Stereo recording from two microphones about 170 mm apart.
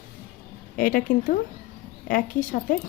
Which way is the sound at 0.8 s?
55° left (ahead or behind).